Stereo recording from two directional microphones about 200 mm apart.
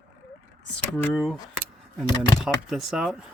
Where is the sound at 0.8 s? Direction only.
5° left (ahead or behind).